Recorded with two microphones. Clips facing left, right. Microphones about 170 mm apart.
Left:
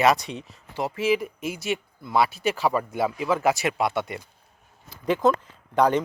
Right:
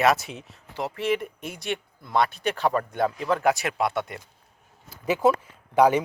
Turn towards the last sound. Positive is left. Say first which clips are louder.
# right 2 dB
turn(degrees=-10)  # may be behind; listen again after turning